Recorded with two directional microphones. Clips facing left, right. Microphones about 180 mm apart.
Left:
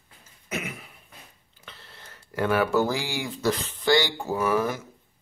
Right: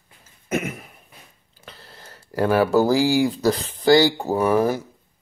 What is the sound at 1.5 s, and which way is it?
Speech, 40° right (ahead or behind).